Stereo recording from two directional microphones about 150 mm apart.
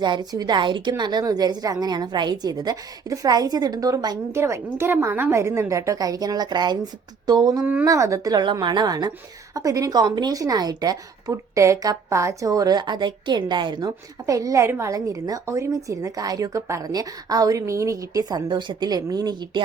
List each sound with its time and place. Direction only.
0.0 s a woman's voice: 30° right (ahead or behind)
7.6 s speech: 10° right (ahead or behind)
7.9 s a woman's voice: 20° right (ahead or behind)